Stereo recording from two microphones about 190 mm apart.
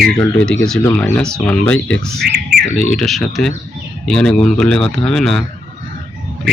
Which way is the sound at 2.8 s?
5° left (ahead or behind).